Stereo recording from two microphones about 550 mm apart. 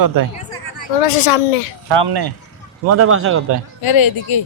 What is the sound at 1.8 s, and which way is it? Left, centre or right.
Speech, right.